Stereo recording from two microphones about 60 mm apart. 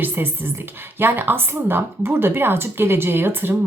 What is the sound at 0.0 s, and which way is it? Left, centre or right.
Speech, right.